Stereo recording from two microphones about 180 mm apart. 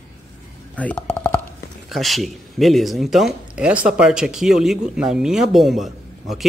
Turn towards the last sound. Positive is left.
turn(degrees=0)  # may be behind; listen again after turning